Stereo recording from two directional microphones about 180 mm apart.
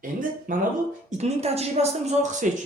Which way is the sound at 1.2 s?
35° right (ahead or behind).